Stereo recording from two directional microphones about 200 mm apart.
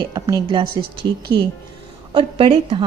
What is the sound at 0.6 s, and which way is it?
Speech, 50° right (ahead or behind).